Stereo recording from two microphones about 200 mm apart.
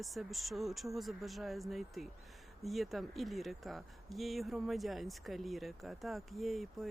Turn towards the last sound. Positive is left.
turn(degrees=0)  # may be behind; listen again after turning